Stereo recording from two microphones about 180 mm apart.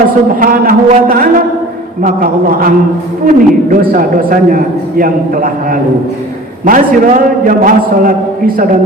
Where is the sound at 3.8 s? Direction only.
50° right (ahead or behind).